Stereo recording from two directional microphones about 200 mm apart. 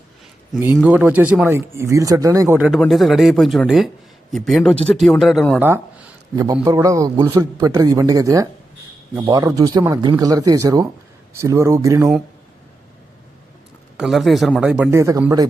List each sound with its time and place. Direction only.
0.9 s a man's voice: 10° right (ahead or behind)
5.6 s speech: 10° right (ahead or behind)
13.9 s a man's voice: centre (ahead or behind)